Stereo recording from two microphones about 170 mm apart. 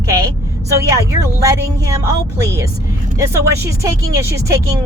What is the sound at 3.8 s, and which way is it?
Speech, 20° right (ahead or behind).